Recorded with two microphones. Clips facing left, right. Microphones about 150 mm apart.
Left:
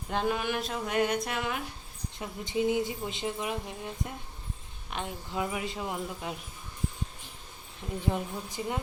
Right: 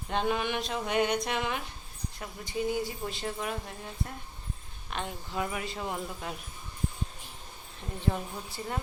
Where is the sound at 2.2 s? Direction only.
20° left (ahead or behind).